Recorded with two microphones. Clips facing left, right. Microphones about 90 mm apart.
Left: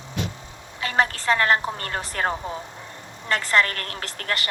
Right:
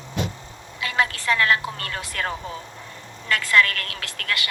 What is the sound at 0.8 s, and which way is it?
A woman's voice, 35° left (ahead or behind).